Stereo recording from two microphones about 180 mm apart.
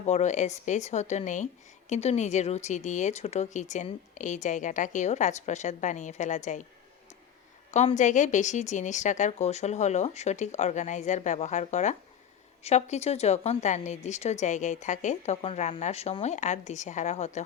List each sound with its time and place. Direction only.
0.0 s speech: 40° left (ahead or behind)
7.7 s speech: 40° left (ahead or behind)